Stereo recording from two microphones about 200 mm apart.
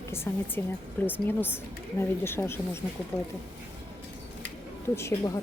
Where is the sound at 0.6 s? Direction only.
10° left (ahead or behind).